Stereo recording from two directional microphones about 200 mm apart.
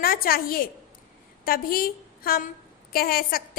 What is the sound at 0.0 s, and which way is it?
A woman's voice, 50° left (ahead or behind).